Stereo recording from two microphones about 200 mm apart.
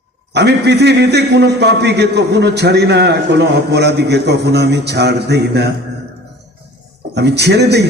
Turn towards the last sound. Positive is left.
turn(degrees=-55)  # may be behind; listen again after turning